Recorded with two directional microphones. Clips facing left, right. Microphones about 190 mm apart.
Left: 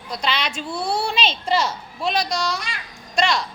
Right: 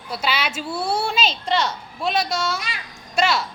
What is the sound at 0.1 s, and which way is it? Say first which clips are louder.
A woman's voice: even; 5° right (ahead or behind).